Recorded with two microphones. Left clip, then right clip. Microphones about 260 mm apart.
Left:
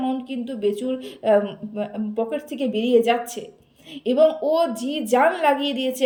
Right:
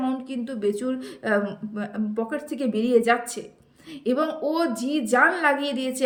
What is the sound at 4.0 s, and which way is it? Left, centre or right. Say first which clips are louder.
A woman's voice: left 7 dB; centre.